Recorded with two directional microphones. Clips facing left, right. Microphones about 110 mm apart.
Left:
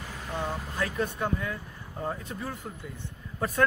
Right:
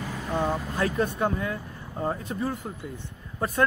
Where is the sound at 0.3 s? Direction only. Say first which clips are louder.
Right 6 dB; 35° right (ahead or behind).